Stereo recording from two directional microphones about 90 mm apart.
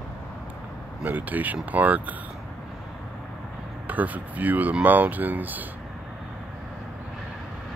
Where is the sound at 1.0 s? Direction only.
20° right (ahead or behind).